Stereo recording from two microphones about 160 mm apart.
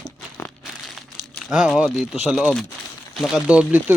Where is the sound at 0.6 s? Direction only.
Centre (ahead or behind).